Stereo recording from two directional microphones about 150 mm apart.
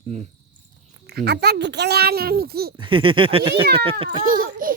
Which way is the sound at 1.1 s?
90° right.